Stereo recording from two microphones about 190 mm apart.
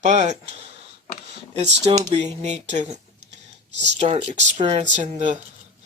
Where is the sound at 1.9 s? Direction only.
35° right (ahead or behind).